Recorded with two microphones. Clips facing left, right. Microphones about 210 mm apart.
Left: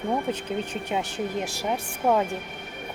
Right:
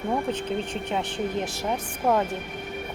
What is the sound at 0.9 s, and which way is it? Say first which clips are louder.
Speech: even; 10° left (ahead or behind).